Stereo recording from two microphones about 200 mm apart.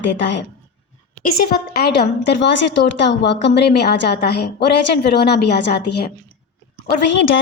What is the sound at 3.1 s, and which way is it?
A woman's voice, 60° left (ahead or behind).